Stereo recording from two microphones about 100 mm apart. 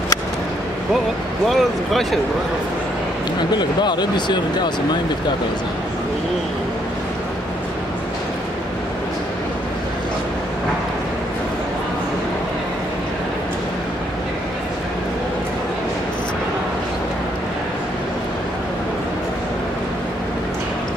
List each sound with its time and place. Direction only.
1.5 s speech: centre (ahead or behind)
3.5 s speech: 45° left (ahead or behind)